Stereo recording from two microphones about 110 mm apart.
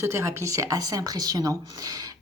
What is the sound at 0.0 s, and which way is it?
A woman's voice, 25° right (ahead or behind).